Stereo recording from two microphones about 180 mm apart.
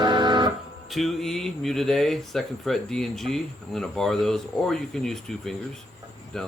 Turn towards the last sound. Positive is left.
turn(degrees=0)  # may be behind; listen again after turning